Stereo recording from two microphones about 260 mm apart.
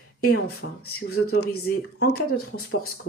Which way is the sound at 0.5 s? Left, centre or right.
Left.